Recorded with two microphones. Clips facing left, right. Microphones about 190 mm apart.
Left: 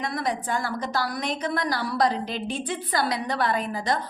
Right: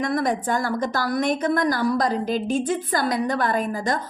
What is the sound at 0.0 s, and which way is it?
A woman's voice, 50° right (ahead or behind).